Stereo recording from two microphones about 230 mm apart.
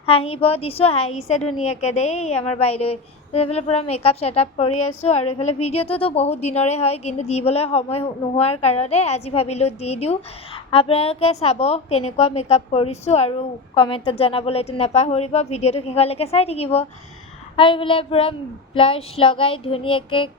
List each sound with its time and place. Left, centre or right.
0.0 s a woman's voice: left
4.7 s speech: left
5.0 s a woman's voice: left